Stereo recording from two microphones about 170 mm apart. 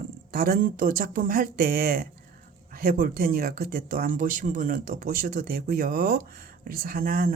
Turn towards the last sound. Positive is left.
turn(degrees=-60)  # may be behind; listen again after turning